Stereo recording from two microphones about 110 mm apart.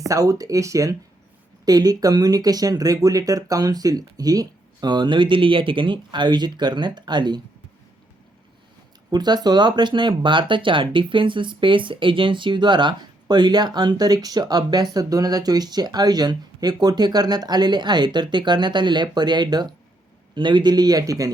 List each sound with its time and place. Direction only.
0.0 s speech: 30° right (ahead or behind)
9.1 s speech: 40° right (ahead or behind)